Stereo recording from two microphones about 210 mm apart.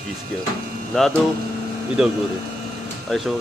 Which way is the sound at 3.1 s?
Centre (ahead or behind).